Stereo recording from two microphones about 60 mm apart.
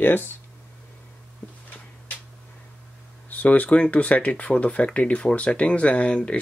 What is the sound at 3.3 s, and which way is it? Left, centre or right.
Speech, left.